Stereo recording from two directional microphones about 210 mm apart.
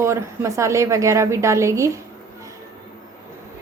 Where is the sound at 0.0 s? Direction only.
15° right (ahead or behind).